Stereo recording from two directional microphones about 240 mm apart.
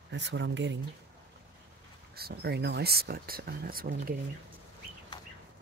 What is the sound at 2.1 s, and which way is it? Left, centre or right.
Speech, right.